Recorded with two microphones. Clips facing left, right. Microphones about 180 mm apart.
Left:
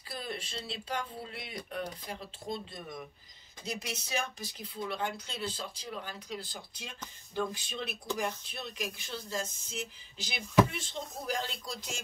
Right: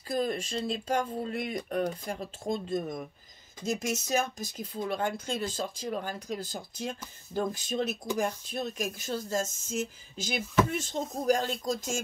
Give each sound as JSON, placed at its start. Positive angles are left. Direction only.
{"t": 0.1, "sound": "speech", "side_deg": -45}